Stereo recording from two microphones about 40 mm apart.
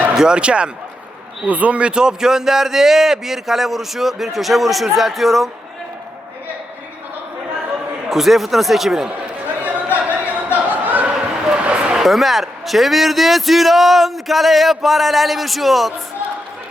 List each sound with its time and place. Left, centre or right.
0.2 s speech: right
1.5 s a man's voice: right; by 5.5 s centre
8.1 s a man's voice: centre
9.6 s a sound: right
11.1 s dog: centre
11.6 s a sound: right
12.0 s a man's voice: centre